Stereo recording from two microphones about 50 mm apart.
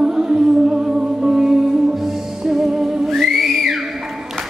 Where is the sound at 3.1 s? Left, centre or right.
Centre.